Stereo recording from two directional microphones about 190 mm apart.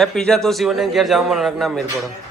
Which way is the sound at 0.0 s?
5° left (ahead or behind).